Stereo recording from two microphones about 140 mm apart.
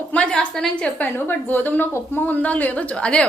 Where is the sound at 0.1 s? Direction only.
5° left (ahead or behind).